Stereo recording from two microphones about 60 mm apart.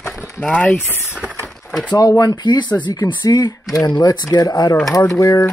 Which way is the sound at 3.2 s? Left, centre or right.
Left.